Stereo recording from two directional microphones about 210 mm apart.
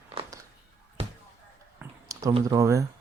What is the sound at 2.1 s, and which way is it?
Typing, 15° right (ahead or behind).